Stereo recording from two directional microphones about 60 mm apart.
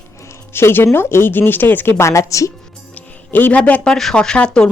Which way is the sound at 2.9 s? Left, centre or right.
Left.